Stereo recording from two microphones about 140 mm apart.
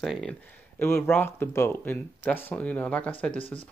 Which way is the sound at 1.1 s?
15° left (ahead or behind).